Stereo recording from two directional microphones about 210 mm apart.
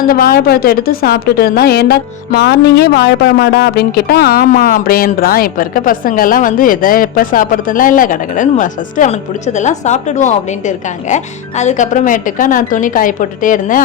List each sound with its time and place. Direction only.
0.0 s a woman's voice: 45° left (ahead or behind)